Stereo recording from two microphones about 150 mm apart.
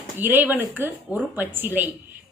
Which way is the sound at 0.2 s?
15° right (ahead or behind).